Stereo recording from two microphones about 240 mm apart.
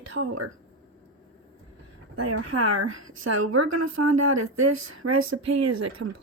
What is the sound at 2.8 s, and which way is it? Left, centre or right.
Speech, right.